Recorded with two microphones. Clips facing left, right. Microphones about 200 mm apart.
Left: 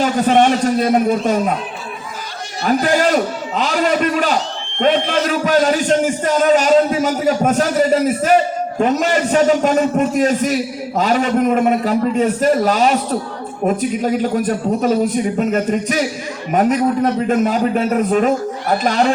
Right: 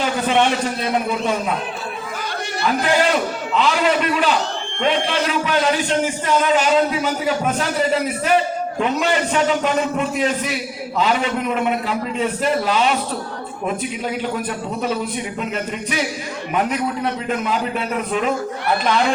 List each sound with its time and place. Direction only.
0.0 s a man's voice: 45° left (ahead or behind)
2.8 s a man's voice: 45° left (ahead or behind)